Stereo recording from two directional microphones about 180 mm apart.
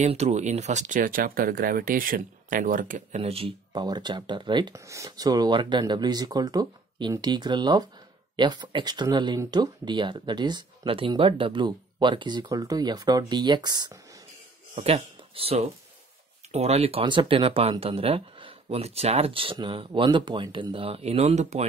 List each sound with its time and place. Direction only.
0.0 s speech: 40° right (ahead or behind)
3.2 s speech: 35° right (ahead or behind)